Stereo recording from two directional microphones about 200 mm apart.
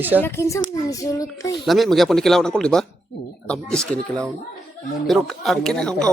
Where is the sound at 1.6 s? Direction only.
Centre (ahead or behind).